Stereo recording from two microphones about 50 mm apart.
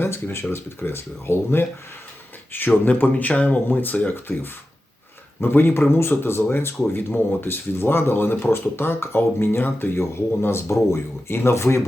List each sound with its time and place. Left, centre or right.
0.0 s speech: left
2.5 s speech: left
6.0 s speech: left